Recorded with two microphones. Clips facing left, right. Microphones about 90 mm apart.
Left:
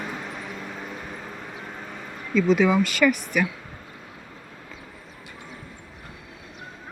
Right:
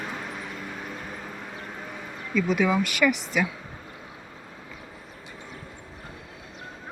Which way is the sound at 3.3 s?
20° right (ahead or behind).